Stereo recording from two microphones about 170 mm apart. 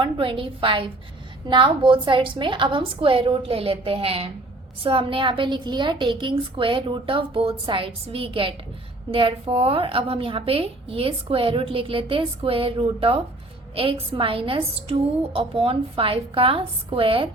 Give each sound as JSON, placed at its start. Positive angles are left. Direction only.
{"t": 0.0, "sound": "a woman's voice", "side_deg": -30}